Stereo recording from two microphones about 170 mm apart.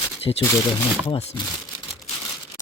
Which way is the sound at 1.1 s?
30° left (ahead or behind).